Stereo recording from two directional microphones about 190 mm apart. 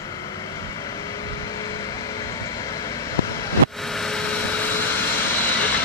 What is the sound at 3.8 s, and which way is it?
Vehicle, centre (ahead or behind).